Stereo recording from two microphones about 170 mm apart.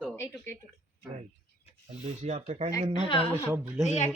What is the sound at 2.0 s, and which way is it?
Speech, 40° right (ahead or behind).